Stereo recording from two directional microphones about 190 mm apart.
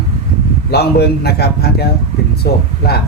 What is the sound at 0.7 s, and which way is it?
Speech, 60° left (ahead or behind).